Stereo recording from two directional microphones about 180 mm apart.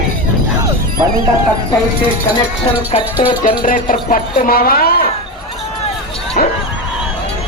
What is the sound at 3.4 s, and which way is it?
Speech, 45° left (ahead or behind).